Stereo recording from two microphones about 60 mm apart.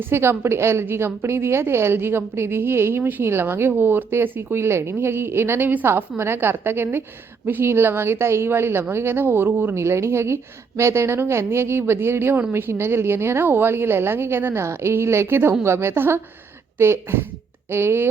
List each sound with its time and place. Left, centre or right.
0.0 s a woman's voice: right
9.7 s a woman's voice: right